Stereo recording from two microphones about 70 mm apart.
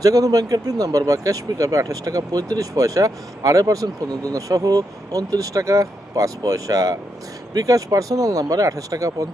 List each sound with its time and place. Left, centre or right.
0.0 s speech: right